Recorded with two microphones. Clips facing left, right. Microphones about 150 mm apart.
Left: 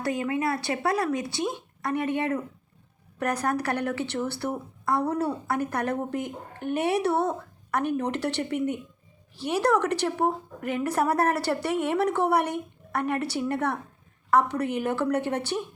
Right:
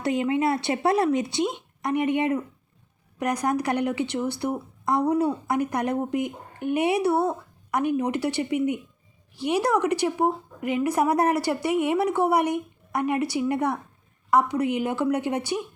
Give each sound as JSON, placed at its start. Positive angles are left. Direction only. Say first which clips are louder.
{"t": 0.0, "sound": "a woman's voice", "louder": "right 4 dB", "side_deg": -20}